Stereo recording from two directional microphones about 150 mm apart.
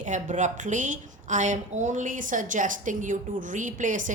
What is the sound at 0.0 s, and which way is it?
A woman's voice, 55° right (ahead or behind).